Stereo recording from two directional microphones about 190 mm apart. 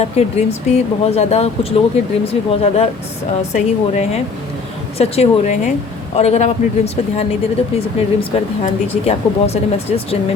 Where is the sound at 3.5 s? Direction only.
35° left (ahead or behind).